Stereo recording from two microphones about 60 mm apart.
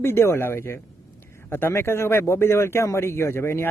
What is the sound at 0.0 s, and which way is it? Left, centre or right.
Speech, left.